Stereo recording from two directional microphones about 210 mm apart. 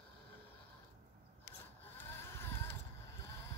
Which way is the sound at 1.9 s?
10° left (ahead or behind).